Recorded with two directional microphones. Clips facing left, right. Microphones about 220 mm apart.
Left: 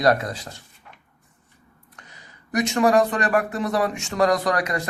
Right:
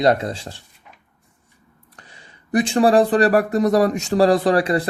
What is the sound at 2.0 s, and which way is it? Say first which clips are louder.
Speech: right 2 dB; 30° right (ahead or behind).